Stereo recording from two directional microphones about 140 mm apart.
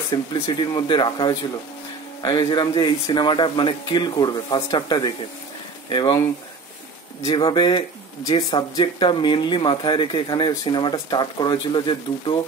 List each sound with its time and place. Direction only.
0.1 s speech: 30° left (ahead or behind)
7.2 s speech: 30° left (ahead or behind)